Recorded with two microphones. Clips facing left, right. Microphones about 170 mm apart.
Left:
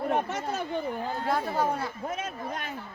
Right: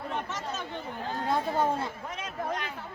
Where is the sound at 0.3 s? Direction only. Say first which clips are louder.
Left 5 dB; 55° left (ahead or behind).